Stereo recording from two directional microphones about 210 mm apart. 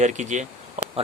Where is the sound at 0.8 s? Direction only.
35° right (ahead or behind).